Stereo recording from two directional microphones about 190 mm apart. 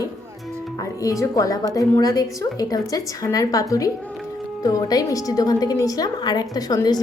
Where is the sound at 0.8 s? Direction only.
15° left (ahead or behind).